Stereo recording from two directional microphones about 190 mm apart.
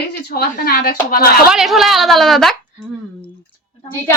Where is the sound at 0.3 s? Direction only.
55° left (ahead or behind).